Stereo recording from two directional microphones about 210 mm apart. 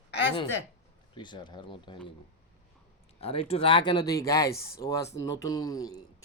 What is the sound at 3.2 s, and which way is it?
Speech, 30° left (ahead or behind).